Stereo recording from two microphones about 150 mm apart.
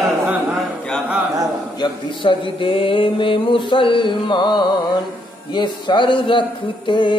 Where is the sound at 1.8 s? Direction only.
30° left (ahead or behind).